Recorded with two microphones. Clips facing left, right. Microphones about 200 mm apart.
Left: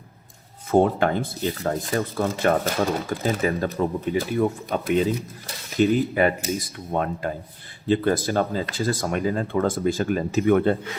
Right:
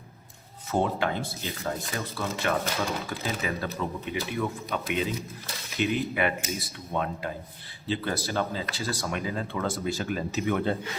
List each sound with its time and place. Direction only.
0.7 s speech: 50° left (ahead or behind)